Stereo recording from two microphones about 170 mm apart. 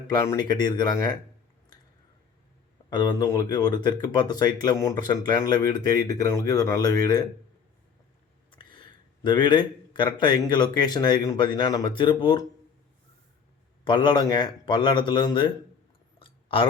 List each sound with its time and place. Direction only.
0.1 s speech: 20° left (ahead or behind)
2.9 s speech: 25° left (ahead or behind)
8.4 s a sound: 30° left (ahead or behind)
9.2 s speech: 25° left (ahead or behind)
13.8 s speech: 30° left (ahead or behind)
16.1 s a sound: 30° left (ahead or behind)